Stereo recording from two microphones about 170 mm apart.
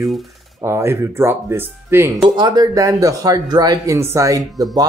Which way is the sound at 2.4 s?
25° right (ahead or behind).